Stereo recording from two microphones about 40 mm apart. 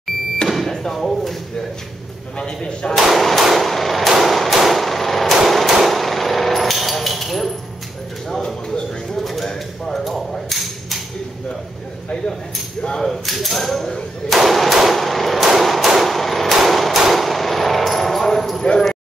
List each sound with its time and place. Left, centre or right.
0.7 s speech: centre
2.3 s speech: left
3.0 s speech: centre
3.6 s gunshot: centre
4.2 s a sound: centre
4.6 s hammer: centre
8.6 s bird: left
9.2 s bird: centre
9.5 s typewriter: centre
10.5 s a sound: centre
12.9 s speech: centre
14.3 s hammer: centre
17.1 s gunshot: centre